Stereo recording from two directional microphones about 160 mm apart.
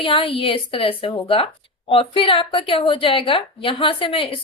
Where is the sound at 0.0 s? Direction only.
35° left (ahead or behind).